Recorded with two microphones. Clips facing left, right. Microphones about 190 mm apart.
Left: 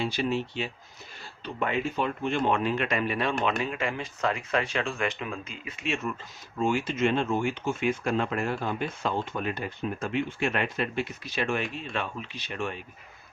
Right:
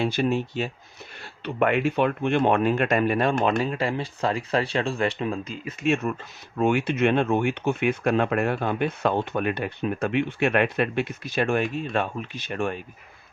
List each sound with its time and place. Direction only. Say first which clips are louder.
0.0 s speech: right 4 dB; 50° right (ahead or behind)
1.2 s speech: right 8 dB; 70° right (ahead or behind); by 6.1 s 55° right (ahead or behind)
6.6 s speech: right 4 dB; 65° right (ahead or behind); by 12.8 s 50° right (ahead or behind)